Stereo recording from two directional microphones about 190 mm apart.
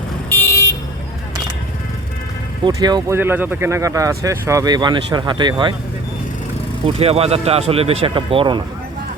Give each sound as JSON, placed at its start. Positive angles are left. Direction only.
{"t": 0.3, "sound": "vehicle", "side_deg": 15}
{"t": 2.6, "sound": "speech", "side_deg": -20}
{"t": 3.2, "sound": "speech", "side_deg": -10}
{"t": 6.8, "sound": "speech", "side_deg": -30}